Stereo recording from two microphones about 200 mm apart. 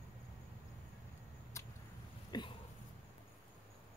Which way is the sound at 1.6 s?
15° left (ahead or behind).